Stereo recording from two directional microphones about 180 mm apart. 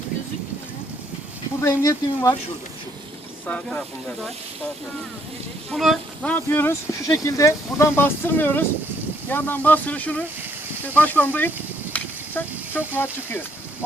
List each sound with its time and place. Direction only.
1.6 s speech: 20° left (ahead or behind)
3.4 s speech: 5° left (ahead or behind)
5.7 s speech: centre (ahead or behind)
6.3 s speech: 10° left (ahead or behind)
11.9 s a sound: 10° left (ahead or behind)